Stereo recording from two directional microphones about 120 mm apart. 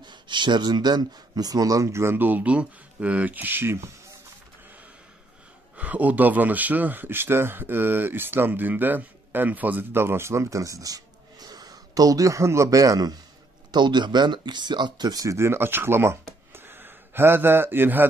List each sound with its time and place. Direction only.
0.0 s speech: 40° right (ahead or behind); by 3.9 s 20° right (ahead or behind)
5.8 s speech: 15° right (ahead or behind)